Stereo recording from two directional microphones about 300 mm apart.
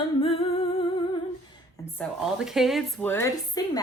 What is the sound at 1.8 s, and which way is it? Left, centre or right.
A woman's voice, centre.